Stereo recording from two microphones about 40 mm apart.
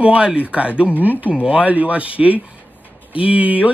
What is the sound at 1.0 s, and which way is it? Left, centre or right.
Speech, right.